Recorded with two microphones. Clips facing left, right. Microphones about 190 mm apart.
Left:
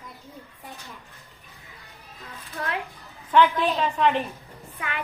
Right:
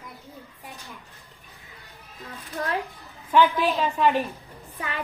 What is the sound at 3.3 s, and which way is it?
Speech, 5° right (ahead or behind).